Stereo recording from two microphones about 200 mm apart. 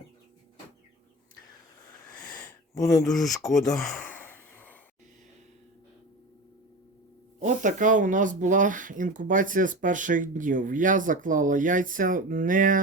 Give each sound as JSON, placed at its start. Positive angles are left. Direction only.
{"t": 2.7, "sound": "speech", "side_deg": 15}
{"t": 3.8, "sound": "sigh", "side_deg": 5}
{"t": 7.3, "sound": "speech", "side_deg": -40}